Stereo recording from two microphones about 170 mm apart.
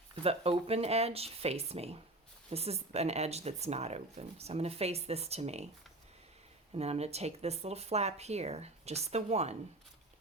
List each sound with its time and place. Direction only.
0.2 s speech: 35° right (ahead or behind)
6.7 s speech: 35° right (ahead or behind)